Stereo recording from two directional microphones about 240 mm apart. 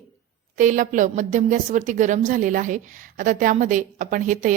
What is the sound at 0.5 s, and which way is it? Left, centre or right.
A woman's voice, right.